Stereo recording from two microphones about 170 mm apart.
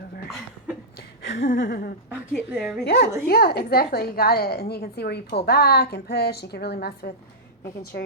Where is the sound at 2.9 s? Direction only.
65° left (ahead or behind).